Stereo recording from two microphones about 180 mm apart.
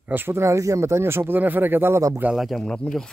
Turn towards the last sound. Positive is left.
turn(degrees=0)  # may be behind; listen again after turning